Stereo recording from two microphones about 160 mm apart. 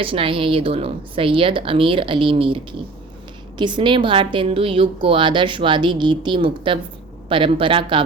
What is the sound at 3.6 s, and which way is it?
A woman's voice, 30° right (ahead or behind).